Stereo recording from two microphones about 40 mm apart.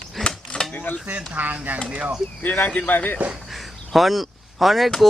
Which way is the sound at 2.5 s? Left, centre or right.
Left.